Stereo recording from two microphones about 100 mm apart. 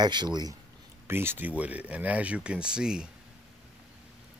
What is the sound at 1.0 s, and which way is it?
Speech, 25° right (ahead or behind).